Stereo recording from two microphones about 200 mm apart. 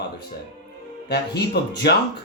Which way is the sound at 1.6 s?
55° left (ahead or behind).